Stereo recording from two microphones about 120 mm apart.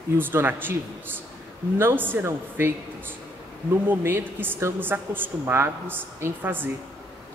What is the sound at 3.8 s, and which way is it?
A woman's voice, 15° right (ahead or behind).